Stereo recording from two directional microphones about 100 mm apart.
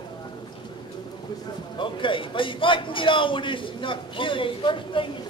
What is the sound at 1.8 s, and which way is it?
A man's voice, 55° left (ahead or behind).